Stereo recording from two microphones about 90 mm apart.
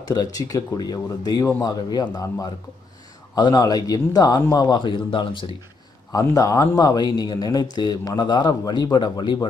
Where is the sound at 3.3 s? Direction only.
50° left (ahead or behind); by 5.6 s 65° left (ahead or behind).